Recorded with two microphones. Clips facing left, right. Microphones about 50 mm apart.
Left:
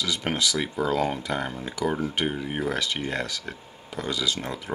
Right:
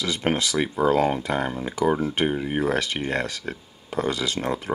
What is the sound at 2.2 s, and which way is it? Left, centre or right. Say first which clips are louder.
Speech: right 4 dB; centre.